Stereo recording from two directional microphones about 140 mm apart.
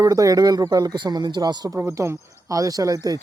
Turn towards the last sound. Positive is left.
turn(degrees=-25)  # may be behind; listen again after turning